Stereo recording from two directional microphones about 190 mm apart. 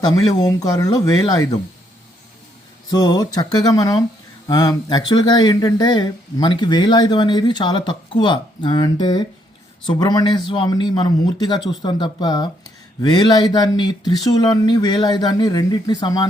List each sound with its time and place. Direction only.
0.0 s speech: 20° left (ahead or behind)
2.9 s speech: 20° left (ahead or behind)